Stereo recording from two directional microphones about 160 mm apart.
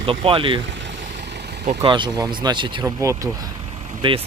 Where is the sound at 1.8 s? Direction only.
30° right (ahead or behind).